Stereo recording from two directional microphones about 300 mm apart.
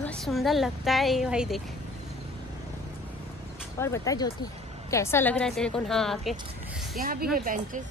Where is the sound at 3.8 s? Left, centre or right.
Centre.